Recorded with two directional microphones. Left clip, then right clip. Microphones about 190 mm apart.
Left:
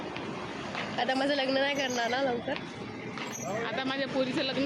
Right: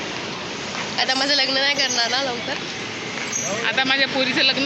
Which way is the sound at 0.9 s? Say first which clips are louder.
Right 9 dB; 45° left (ahead or behind).